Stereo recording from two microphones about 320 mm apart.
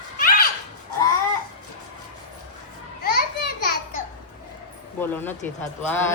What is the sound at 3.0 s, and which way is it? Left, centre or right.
Children playing, left.